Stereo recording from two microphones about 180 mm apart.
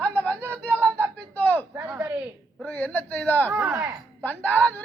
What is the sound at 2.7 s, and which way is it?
Speech, 10° left (ahead or behind).